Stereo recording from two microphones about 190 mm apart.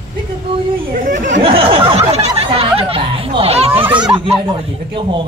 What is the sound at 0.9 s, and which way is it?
Speech, 45° right (ahead or behind).